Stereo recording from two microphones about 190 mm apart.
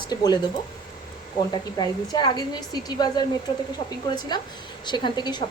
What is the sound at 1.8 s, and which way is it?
A woman's voice, 25° left (ahead or behind).